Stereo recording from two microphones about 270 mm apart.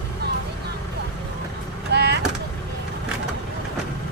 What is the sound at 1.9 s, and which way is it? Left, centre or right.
Vehicle, right.